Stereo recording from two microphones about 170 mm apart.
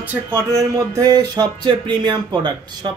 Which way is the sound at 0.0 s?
10° right (ahead or behind).